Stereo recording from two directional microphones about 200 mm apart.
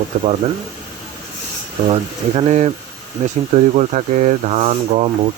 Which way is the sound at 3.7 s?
35° right (ahead or behind).